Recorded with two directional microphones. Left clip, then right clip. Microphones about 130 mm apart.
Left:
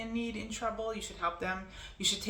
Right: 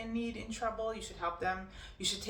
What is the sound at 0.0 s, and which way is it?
A woman's voice, 25° left (ahead or behind).